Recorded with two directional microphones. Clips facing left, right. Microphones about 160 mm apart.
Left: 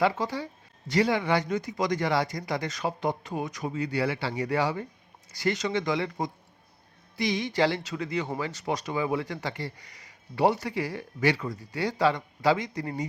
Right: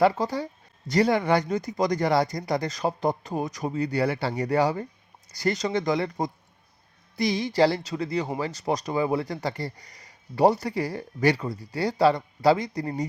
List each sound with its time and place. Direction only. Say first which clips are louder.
0.0 s speech: right 4 dB; 40° right (ahead or behind)